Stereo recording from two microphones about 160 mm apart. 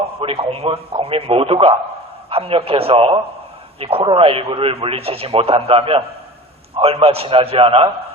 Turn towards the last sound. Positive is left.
turn(degrees=-35)  # may be behind; listen again after turning